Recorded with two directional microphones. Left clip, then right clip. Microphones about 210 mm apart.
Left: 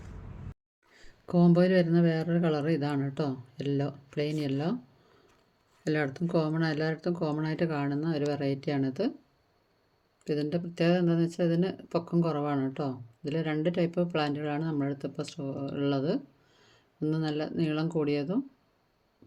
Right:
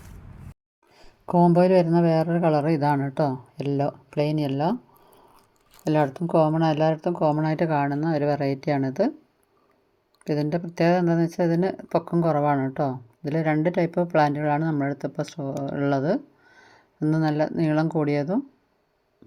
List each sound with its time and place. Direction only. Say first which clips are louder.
0.9 s speech: right 8 dB; 15° right (ahead or behind)
6.0 s speech: right 11 dB; 10° right (ahead or behind)
10.2 s speech: right 5 dB; 20° right (ahead or behind)